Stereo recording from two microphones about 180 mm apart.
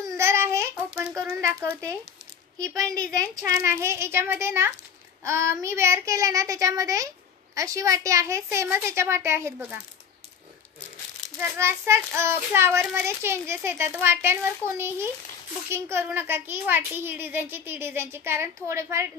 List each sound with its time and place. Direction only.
0.2 s child singing: 15° right (ahead or behind)
11.3 s child singing: 15° right (ahead or behind)